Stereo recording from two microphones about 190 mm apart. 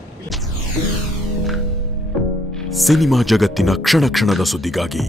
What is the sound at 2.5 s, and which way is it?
Speech, centre (ahead or behind).